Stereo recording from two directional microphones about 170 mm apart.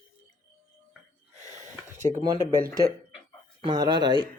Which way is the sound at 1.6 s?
45° right (ahead or behind).